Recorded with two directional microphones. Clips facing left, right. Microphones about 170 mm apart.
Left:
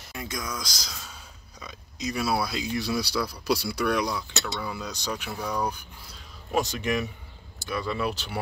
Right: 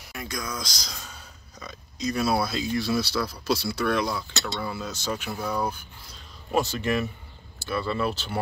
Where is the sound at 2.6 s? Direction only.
20° left (ahead or behind).